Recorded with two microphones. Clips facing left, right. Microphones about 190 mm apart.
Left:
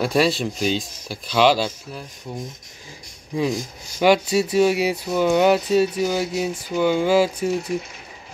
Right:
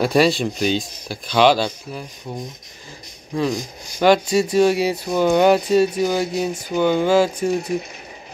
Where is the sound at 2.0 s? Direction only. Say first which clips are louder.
Right 1 dB; 20° right (ahead or behind).